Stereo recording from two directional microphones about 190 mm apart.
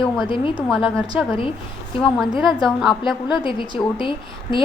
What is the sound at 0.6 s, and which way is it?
Speech, centre (ahead or behind).